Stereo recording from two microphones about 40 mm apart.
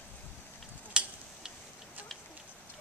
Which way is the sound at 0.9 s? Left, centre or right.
Right.